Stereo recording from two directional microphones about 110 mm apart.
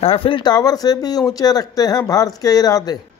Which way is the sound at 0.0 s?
60° left (ahead or behind).